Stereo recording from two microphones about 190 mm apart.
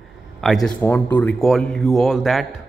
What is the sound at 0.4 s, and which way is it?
Speech, centre (ahead or behind).